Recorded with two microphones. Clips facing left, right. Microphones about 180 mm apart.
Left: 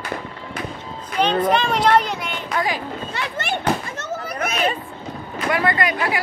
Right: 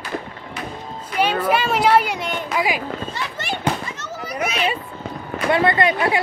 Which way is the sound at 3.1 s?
55° left (ahead or behind).